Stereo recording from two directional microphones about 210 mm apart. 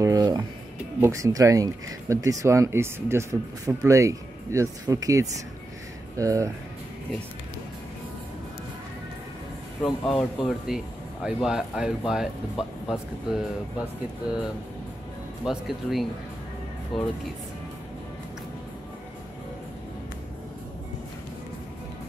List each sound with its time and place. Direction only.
0.0 s music: 20° right (ahead or behind)
1.0 s speech: 15° right (ahead or behind)
9.8 s speech: centre (ahead or behind)
15.4 s speech: centre (ahead or behind)